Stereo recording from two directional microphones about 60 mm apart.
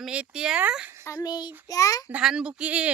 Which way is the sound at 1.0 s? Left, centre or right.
Left.